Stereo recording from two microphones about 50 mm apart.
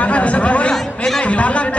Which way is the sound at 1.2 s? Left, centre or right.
Left.